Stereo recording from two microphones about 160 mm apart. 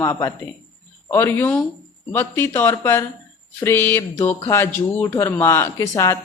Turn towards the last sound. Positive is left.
turn(degrees=20)  # may be behind; listen again after turning